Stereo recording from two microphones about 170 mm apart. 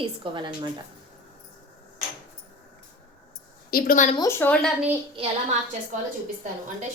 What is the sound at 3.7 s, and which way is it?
Speech, 55° left (ahead or behind).